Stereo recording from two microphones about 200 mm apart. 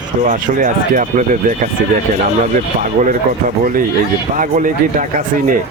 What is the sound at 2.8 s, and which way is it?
Speech, 40° right (ahead or behind).